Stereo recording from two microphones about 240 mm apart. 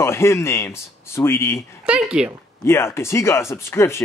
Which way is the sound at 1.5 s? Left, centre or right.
Centre.